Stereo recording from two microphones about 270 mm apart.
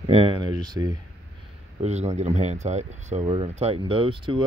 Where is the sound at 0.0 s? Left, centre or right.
Centre.